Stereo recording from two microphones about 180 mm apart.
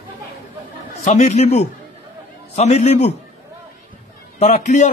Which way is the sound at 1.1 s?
40° left (ahead or behind).